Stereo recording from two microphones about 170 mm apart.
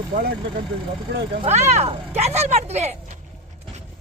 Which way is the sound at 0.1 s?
55° right (ahead or behind).